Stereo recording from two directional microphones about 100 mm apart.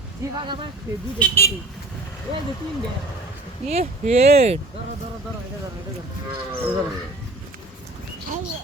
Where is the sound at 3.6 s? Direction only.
90° right.